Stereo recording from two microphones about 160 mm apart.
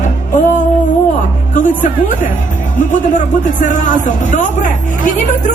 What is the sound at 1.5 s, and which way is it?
Speech, 55° left (ahead or behind).